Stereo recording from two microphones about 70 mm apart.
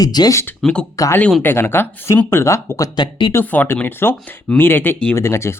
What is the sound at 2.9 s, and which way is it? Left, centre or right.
Speech, left.